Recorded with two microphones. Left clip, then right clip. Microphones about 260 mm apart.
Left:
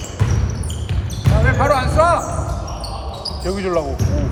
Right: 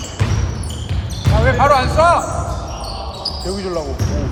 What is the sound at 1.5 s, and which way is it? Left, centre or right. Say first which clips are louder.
Basketball bounce: right 3 dB; centre.